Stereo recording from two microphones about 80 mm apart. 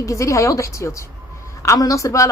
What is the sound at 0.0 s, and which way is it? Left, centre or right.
A woman's voice, left.